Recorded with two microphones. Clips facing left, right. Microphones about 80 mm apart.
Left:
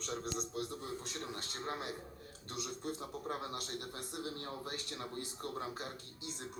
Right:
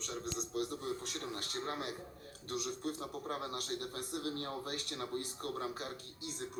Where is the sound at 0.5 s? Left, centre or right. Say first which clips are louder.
Right 3 dB; left.